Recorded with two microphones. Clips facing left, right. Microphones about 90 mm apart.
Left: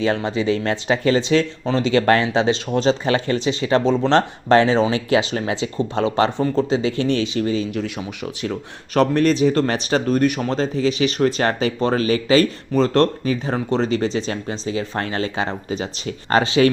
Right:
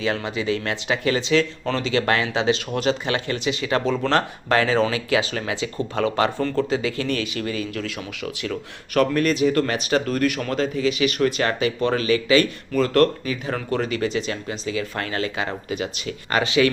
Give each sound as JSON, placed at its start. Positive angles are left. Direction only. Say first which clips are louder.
{"t": 0.0, "sound": "speech", "louder": "left 4 dB", "side_deg": 35}